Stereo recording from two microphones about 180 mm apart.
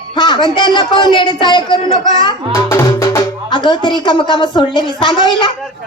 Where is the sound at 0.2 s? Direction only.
25° left (ahead or behind).